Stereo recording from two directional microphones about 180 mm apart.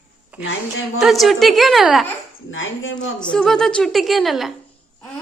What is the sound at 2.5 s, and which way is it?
Speech, 90° left.